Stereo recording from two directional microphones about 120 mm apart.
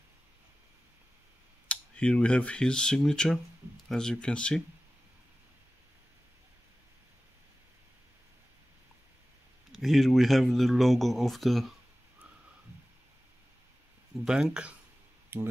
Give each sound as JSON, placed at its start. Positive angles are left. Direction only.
{"t": 1.7, "sound": "speech", "side_deg": 10}
{"t": 9.7, "sound": "speech", "side_deg": 0}
{"t": 14.2, "sound": "speech", "side_deg": -5}